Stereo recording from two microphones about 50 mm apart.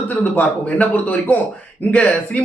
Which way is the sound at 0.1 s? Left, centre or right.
Left.